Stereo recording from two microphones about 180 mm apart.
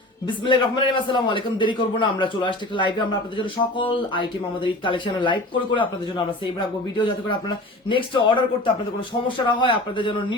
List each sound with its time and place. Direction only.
0.3 s a man's voice: 25° left (ahead or behind)